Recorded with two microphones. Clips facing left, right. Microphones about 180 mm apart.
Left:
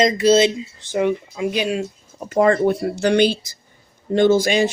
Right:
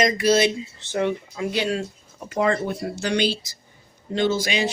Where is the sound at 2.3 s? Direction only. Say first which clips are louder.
Left 7 dB; 50° left (ahead or behind).